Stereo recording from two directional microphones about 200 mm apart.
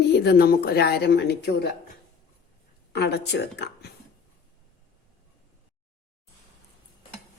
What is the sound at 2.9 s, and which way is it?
Speech, 55° left (ahead or behind).